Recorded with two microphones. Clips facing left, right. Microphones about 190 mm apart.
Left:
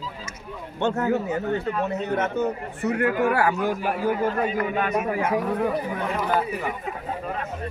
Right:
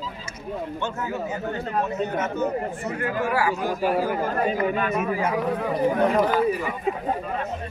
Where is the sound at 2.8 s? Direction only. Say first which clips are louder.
Left 4 dB; 65° left (ahead or behind).